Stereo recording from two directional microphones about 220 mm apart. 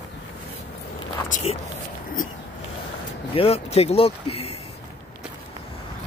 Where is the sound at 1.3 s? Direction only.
30° left (ahead or behind).